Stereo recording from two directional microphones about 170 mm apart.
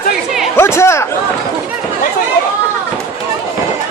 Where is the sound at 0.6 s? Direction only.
15° left (ahead or behind).